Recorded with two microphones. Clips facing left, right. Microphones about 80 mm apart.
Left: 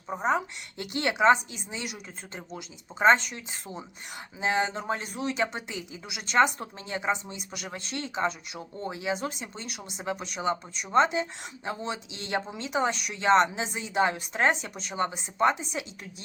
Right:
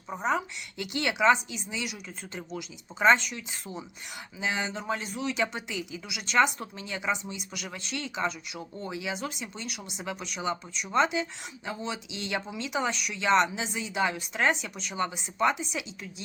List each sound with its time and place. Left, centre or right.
0.3 s speech: left